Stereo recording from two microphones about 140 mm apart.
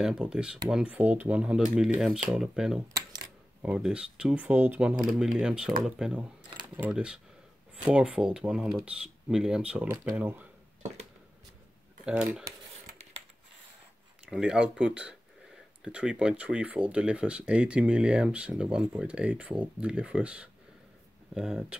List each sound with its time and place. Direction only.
0.0 s speech: 5° right (ahead or behind)
12.0 s speech: 10° right (ahead or behind)
14.3 s speech: 5° right (ahead or behind)